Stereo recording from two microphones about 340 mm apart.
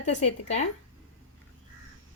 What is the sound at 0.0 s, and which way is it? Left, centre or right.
Speech, centre.